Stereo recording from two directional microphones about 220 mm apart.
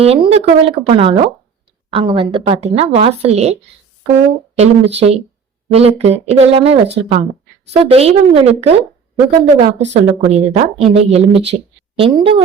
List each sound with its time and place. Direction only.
0.0 s a woman's voice: 25° right (ahead or behind)